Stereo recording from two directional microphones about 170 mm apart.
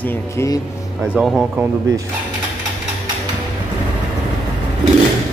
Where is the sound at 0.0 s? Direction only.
15° left (ahead or behind).